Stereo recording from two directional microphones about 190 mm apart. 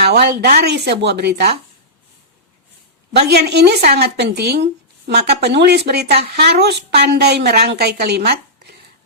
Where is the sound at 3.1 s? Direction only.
60° right (ahead or behind).